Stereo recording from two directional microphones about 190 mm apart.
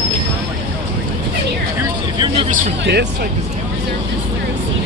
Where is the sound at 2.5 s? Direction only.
60° right (ahead or behind).